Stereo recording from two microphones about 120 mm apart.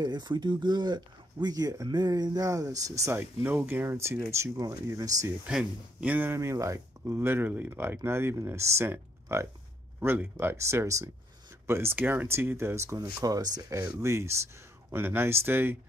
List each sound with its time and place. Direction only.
0.0 s speech: 35° right (ahead or behind)
3.2 s speech: 15° right (ahead or behind)
5.5 s speech: 5° right (ahead or behind)